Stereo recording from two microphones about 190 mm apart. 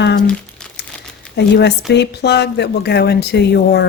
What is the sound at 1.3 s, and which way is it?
Speech, 60° left (ahead or behind).